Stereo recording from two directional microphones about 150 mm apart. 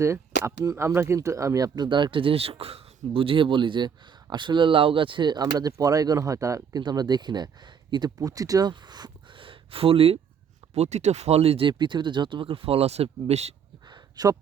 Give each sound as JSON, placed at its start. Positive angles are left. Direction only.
{"t": 0.0, "sound": "speech", "side_deg": -20}
{"t": 11.7, "sound": "speech", "side_deg": -30}
{"t": 13.8, "sound": "a sound", "side_deg": -25}